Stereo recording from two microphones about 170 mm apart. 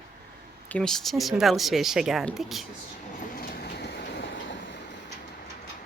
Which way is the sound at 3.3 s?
65° left (ahead or behind).